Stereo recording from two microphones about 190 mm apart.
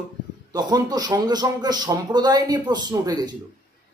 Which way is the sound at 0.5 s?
20° right (ahead or behind).